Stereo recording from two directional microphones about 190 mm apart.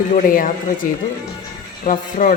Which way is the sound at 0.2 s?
45° left (ahead or behind).